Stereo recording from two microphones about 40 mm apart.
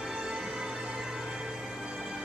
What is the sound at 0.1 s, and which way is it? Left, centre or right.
Music, centre.